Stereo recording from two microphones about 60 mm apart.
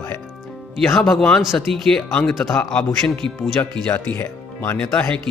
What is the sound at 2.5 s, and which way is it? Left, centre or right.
Speech, left.